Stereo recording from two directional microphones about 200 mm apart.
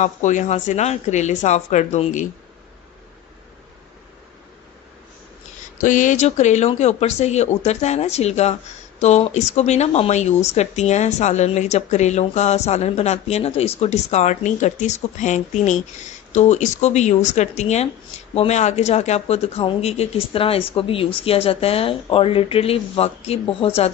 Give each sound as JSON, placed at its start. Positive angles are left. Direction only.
{"t": 0.0, "sound": "a woman's voice", "side_deg": 35}
{"t": 5.8, "sound": "a woman's voice", "side_deg": 40}